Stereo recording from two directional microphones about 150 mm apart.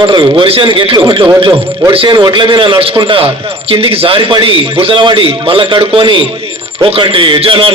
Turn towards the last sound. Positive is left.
turn(degrees=-35)  # may be behind; listen again after turning